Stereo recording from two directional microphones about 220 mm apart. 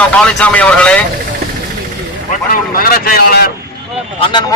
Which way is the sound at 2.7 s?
40° left (ahead or behind).